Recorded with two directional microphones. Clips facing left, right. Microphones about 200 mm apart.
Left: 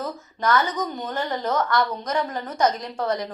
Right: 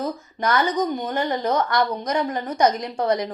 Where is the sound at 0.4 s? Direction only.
15° right (ahead or behind).